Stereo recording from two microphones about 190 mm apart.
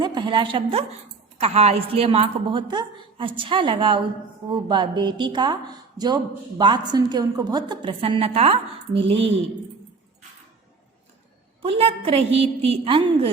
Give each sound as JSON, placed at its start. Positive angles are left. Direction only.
{"t": 0.0, "sound": "a woman's voice", "side_deg": -25}
{"t": 11.6, "sound": "a woman's voice", "side_deg": -30}